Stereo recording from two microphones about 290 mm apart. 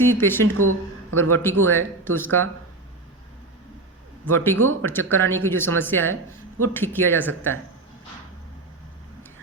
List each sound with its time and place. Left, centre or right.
0.0 s speech: centre
0.4 s speech: right
1.3 s speech: centre
4.5 s speech: right
4.9 s speech: centre